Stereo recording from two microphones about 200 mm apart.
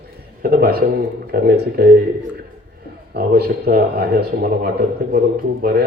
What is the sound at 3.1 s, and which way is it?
A man's voice, 55° right (ahead or behind).